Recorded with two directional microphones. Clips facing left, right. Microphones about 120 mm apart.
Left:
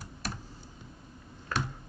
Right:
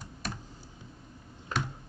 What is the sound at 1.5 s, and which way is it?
Computer keyboard, 20° right (ahead or behind).